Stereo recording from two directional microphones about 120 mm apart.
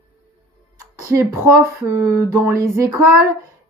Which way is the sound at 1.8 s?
30° right (ahead or behind).